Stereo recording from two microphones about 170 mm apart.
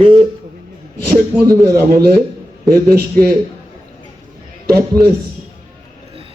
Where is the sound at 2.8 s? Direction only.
65° right (ahead or behind).